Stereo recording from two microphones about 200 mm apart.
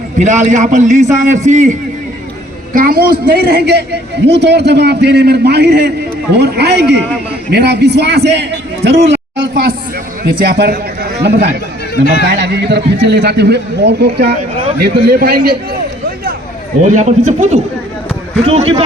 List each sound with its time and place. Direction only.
0.2 s a man's voice: 35° right (ahead or behind)
2.7 s a woman's voice: 50° right (ahead or behind)
9.0 s a sound: 60° right (ahead or behind)
10.2 s a man's voice: 50° right (ahead or behind)
16.8 s a man's voice: 40° right (ahead or behind)